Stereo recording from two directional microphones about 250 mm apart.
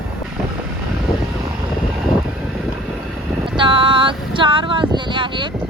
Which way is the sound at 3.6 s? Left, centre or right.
Right.